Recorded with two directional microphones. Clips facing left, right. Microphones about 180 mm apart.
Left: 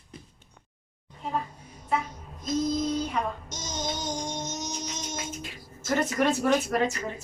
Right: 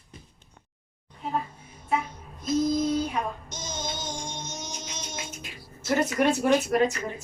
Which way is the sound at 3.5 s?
40° left (ahead or behind).